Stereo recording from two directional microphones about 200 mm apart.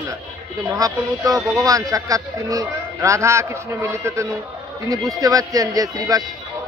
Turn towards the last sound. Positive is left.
turn(degrees=-15)  # may be behind; listen again after turning